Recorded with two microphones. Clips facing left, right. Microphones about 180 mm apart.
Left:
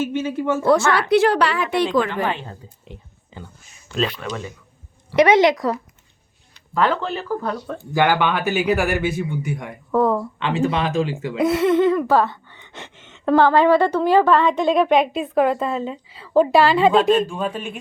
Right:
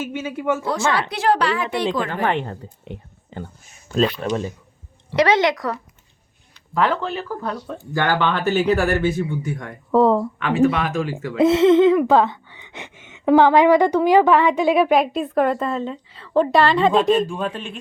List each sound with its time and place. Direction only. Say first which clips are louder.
0.0 s a sound: left 3 dB; 10° right (ahead or behind)
0.9 s a woman's voice: left 4 dB; 65° left (ahead or behind)
2.0 s speech: right 2 dB; 60° right (ahead or behind); by 4.5 s 35° right (ahead or behind)
5.1 s speech: left 3 dB; 20° left (ahead or behind)
6.7 s speech: even; 5° right (ahead or behind)
7.9 s speech: left 2 dB; 15° left (ahead or behind)
9.9 s speech: right 3 dB; 25° right (ahead or behind)
10.4 s speech: right 2 dB; 25° left (ahead or behind)
11.3 s a sound: right 4 dB; 25° right (ahead or behind); by 17.7 s 5° left (ahead or behind)